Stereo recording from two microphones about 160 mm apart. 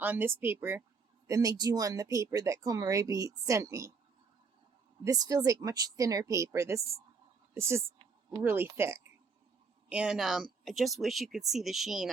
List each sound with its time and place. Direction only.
0.0 s speech: 10° right (ahead or behind)
5.0 s speech: 20° right (ahead or behind)
9.9 s speech: 5° right (ahead or behind)